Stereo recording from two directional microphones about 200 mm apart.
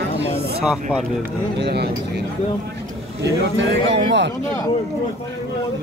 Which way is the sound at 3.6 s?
65° right (ahead or behind).